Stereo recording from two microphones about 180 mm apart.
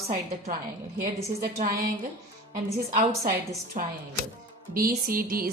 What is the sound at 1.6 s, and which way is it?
A woman's voice, 55° right (ahead or behind).